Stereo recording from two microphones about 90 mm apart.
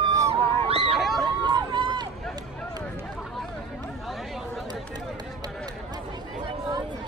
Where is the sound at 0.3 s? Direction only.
90° right.